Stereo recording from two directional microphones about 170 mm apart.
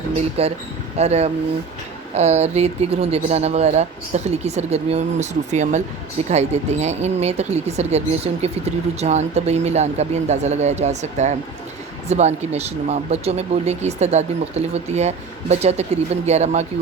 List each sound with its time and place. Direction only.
0.4 s speech: 35° right (ahead or behind)